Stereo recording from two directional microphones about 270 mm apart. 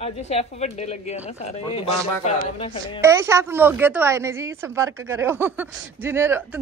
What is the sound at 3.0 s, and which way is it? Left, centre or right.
A woman's voice, centre.